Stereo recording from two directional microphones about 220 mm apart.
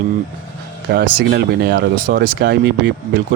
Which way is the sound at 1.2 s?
45° right (ahead or behind).